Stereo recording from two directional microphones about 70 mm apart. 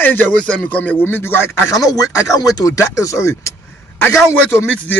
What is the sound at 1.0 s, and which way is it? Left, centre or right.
Speech, left.